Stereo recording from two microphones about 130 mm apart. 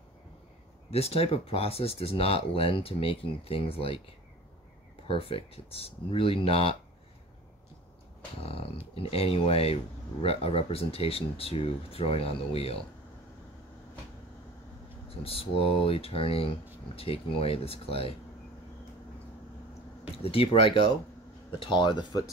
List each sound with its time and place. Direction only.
0.8 s speech: 50° left (ahead or behind)
5.0 s speech: 45° left (ahead or behind)
8.4 s speech: 45° left (ahead or behind)
15.0 s speech: 45° left (ahead or behind)
20.2 s speech: 45° left (ahead or behind)